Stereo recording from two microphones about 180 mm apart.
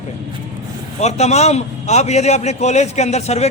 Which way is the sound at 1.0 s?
35° left (ahead or behind).